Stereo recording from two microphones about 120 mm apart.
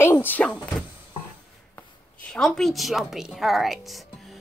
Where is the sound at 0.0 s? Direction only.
15° left (ahead or behind).